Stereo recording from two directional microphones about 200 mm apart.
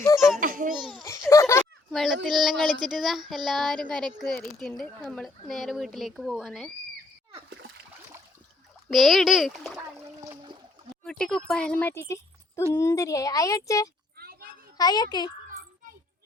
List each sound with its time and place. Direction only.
0.0 s babbling: 15° left (ahead or behind)
0.3 s babbling: 45° right (ahead or behind)
1.0 s a sound: 15° left (ahead or behind)
1.9 s a child's voice: centre (ahead or behind)
8.9 s speech: centre (ahead or behind)
11.0 s speech: 5° left (ahead or behind)
14.2 s children playing: 50° right (ahead or behind)
14.8 s a child's voice: 20° left (ahead or behind)